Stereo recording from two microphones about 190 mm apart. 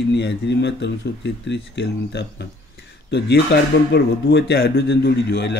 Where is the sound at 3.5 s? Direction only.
60° left (ahead or behind).